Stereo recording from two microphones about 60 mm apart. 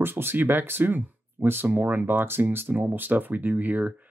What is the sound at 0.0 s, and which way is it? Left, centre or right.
Speech, right.